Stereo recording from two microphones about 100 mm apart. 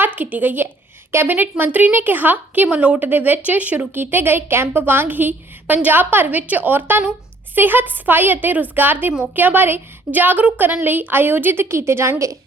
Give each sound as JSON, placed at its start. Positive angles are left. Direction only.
{"t": 0.2, "sound": "a woman's voice", "side_deg": -15}